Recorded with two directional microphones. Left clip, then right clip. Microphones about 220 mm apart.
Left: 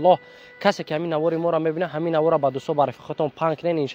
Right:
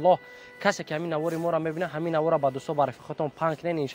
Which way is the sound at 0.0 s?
45° left (ahead or behind).